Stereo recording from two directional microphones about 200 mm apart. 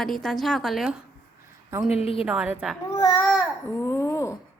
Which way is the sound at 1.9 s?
30° left (ahead or behind).